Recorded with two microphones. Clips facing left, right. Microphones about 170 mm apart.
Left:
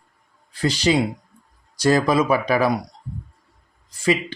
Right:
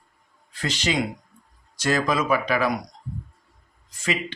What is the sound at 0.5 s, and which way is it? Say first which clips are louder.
Speech: left 6 dB; 35° left (ahead or behind).